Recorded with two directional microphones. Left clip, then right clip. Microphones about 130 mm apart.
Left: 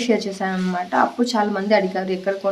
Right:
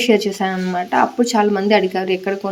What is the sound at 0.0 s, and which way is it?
Speech, 30° right (ahead or behind).